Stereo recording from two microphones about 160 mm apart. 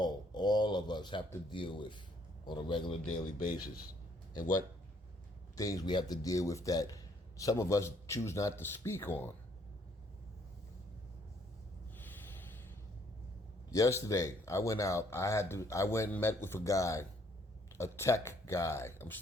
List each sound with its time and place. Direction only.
0.0 s a sound: 25° left (ahead or behind)
1.5 s speech: 30° left (ahead or behind)
5.5 s a man's voice: 20° left (ahead or behind)
13.7 s a man's voice: 20° left (ahead or behind)